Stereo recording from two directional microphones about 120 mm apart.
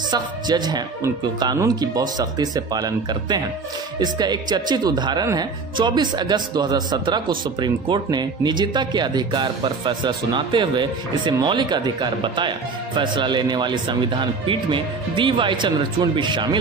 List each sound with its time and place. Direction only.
0.1 s speech: 35° right (ahead or behind)